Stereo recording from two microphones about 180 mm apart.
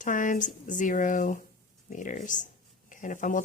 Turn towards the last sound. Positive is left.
turn(degrees=45)  # may be behind; listen again after turning